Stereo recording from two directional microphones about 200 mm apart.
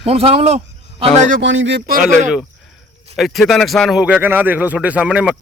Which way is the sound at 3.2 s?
Centre (ahead or behind).